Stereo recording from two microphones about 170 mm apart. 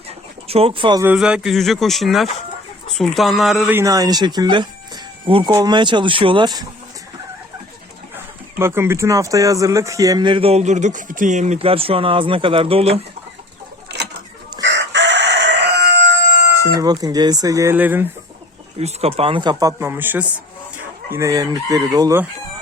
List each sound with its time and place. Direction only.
0.4 s speech: 35° right (ahead or behind)
1.0 s speech: 5° right (ahead or behind)
3.8 s speech: 20° right (ahead or behind)
8.1 s speech: 15° right (ahead or behind); by 13.0 s 35° right (ahead or behind)
14.6 s fowl: 90° right
16.5 s speech: 25° right (ahead or behind)
18.8 s speech: 40° right (ahead or behind); by 22.2 s 20° right (ahead or behind)